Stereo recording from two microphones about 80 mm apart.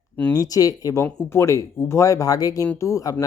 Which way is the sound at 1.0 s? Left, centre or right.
Left.